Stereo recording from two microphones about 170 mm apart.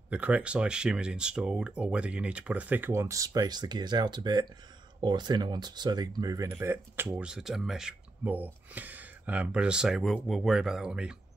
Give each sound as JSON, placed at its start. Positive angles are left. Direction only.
{"t": 0.1, "sound": "speech", "side_deg": -5}